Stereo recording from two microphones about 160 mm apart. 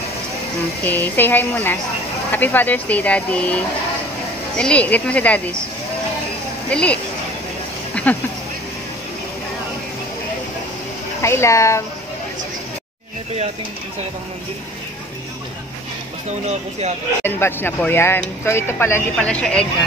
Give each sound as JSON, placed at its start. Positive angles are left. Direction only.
{"t": 0.8, "sound": "speech", "side_deg": 10}
{"t": 6.7, "sound": "speech", "side_deg": 5}
{"t": 7.9, "sound": "a sound", "side_deg": 10}
{"t": 11.2, "sound": "speech", "side_deg": 15}
{"t": 17.2, "sound": "speech", "side_deg": 15}